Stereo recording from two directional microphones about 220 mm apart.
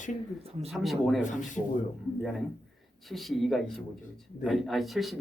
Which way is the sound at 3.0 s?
Centre (ahead or behind).